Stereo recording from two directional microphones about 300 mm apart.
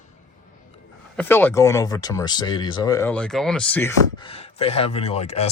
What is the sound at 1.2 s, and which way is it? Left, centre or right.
Speech, centre.